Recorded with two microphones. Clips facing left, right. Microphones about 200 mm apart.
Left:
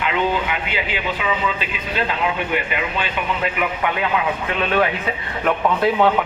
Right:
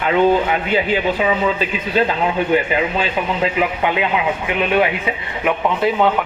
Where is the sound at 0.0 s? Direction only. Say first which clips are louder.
Right 6 dB; 40° right (ahead or behind).